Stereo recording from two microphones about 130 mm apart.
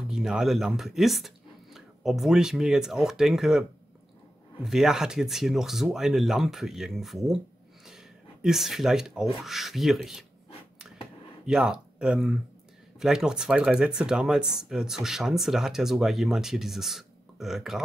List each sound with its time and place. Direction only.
0.0 s speech: 5° right (ahead or behind)
4.6 s speech: 5° right (ahead or behind)
7.8 s zipper: 5° right (ahead or behind)
9.4 s speech: centre (ahead or behind)
11.4 s speech: 5° right (ahead or behind)